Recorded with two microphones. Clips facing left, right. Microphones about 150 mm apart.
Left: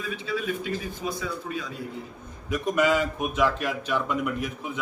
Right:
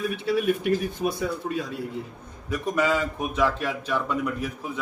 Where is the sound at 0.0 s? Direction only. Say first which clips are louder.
Right 6 dB; 65° right (ahead or behind).